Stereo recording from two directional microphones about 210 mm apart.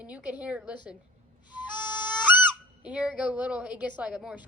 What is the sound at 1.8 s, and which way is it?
Harmonica, 10° right (ahead or behind).